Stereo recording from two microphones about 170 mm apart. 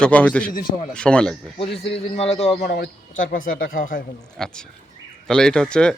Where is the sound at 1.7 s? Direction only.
75° left (ahead or behind).